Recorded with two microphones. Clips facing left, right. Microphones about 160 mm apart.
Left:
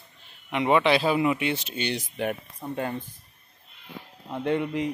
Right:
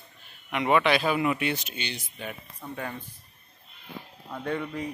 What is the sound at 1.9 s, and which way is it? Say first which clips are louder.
Speech: left 9 dB; 70° left (ahead or behind).